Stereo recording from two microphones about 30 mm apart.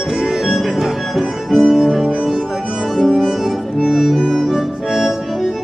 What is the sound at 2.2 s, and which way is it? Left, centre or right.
Music, centre.